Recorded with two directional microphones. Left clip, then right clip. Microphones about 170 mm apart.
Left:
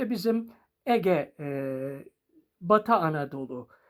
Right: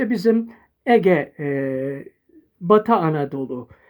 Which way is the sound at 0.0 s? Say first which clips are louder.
Right 9 dB; centre (ahead or behind).